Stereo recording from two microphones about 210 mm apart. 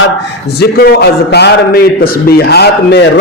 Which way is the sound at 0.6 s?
50° left (ahead or behind).